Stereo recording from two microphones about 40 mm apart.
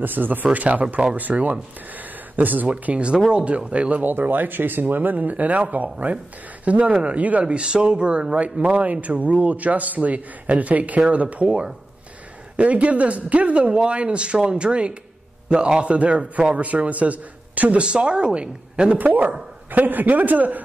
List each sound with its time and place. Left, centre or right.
0.0 s speech: right
2.7 s speech: right
4.0 s speech: right
17.8 s speech: right
18.9 s speech: right